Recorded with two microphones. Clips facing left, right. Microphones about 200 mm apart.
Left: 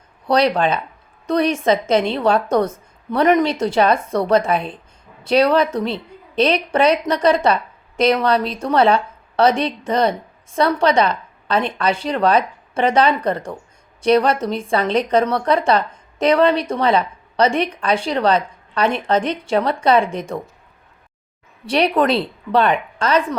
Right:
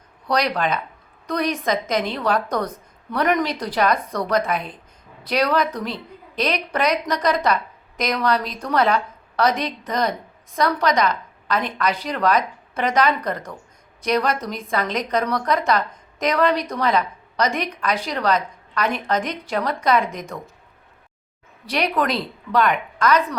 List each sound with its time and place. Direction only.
0.3 s a woman's voice: 30° left (ahead or behind)
21.7 s a woman's voice: 30° left (ahead or behind)